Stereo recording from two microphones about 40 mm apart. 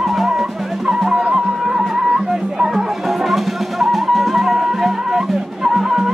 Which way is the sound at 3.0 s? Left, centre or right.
Centre.